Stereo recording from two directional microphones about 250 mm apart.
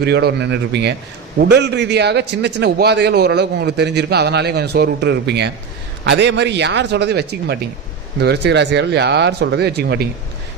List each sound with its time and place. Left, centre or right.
0.0 s a man's voice: right